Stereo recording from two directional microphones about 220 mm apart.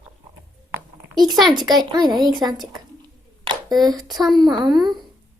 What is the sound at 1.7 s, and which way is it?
Speech, 20° right (ahead or behind).